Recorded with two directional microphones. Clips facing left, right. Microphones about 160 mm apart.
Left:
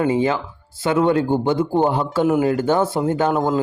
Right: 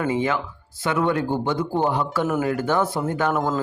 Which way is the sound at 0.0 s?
30° left (ahead or behind).